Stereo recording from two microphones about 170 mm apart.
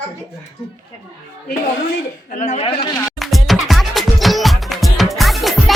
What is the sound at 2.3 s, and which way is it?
Speech, 40° left (ahead or behind).